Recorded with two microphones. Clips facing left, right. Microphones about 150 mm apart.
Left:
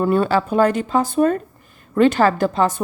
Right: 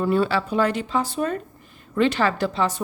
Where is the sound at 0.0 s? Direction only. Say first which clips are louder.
Left 4 dB; 50° left (ahead or behind).